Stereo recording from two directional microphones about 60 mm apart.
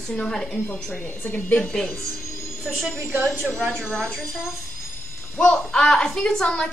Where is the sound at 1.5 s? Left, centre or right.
Centre.